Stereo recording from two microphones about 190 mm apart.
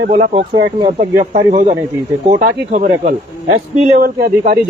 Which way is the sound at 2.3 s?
50° right (ahead or behind).